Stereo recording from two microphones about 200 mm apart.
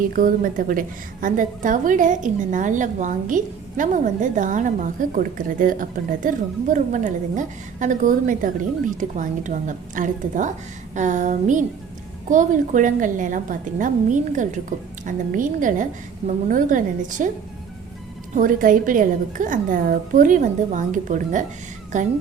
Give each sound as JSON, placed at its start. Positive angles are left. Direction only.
{"t": 0.1, "sound": "a woman's voice", "side_deg": -45}
{"t": 18.3, "sound": "a woman's voice", "side_deg": -40}